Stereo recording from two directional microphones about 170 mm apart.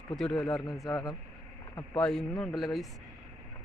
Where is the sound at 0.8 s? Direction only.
25° left (ahead or behind).